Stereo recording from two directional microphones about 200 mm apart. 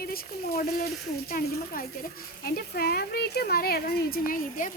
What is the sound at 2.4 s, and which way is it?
A woman's voice, 50° left (ahead or behind).